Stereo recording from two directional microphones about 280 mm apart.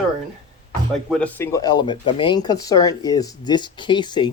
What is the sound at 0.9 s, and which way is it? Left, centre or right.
Speech, centre.